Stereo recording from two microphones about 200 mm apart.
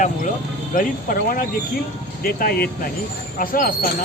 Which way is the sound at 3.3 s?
45° left (ahead or behind).